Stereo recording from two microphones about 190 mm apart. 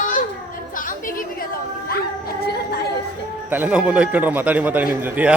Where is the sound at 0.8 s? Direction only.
45° left (ahead or behind).